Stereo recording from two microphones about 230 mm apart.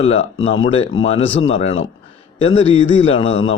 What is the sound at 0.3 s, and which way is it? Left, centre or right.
A man's voice, left.